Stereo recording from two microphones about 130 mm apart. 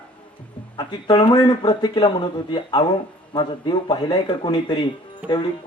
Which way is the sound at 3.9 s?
45° left (ahead or behind).